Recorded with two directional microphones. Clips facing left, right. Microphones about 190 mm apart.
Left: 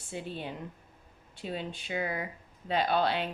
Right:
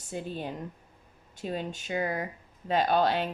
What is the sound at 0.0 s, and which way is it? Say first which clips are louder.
Speech: right 3 dB; 45° right (ahead or behind).